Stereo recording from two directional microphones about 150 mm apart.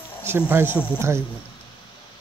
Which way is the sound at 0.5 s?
15° right (ahead or behind).